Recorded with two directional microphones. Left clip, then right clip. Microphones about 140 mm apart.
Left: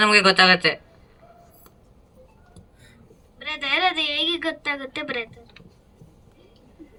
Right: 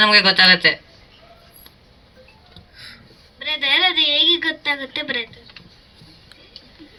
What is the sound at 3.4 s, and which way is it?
A woman's voice, 40° left (ahead or behind).